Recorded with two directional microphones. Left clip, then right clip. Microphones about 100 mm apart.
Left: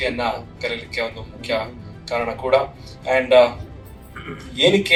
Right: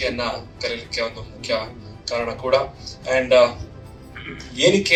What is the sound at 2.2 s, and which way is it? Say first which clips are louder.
A man's voice: left 2 dB; 25° right (ahead or behind).